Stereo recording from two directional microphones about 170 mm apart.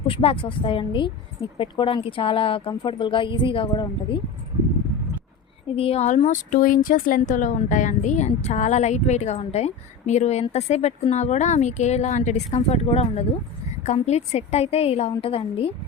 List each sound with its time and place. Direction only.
0.1 s a woman's voice: 35° left (ahead or behind)
5.7 s speech: 35° left (ahead or behind)